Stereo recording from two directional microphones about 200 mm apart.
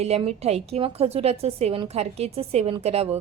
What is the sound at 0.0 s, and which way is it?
A woman's voice, 30° right (ahead or behind).